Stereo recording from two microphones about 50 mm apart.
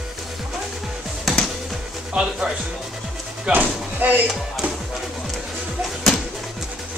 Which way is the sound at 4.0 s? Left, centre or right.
Right.